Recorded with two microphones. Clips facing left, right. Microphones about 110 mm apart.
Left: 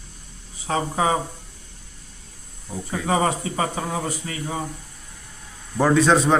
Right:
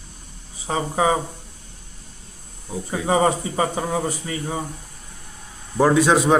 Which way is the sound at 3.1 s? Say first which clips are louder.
Right 3 dB; 25° right (ahead or behind).